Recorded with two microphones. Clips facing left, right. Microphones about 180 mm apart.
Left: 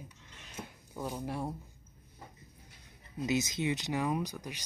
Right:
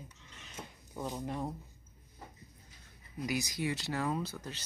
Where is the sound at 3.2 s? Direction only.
25° left (ahead or behind).